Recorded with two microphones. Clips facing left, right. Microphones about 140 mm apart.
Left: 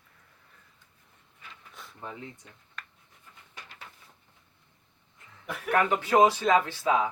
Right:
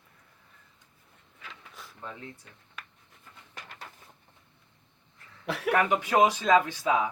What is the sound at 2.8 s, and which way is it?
Writing, 5° right (ahead or behind).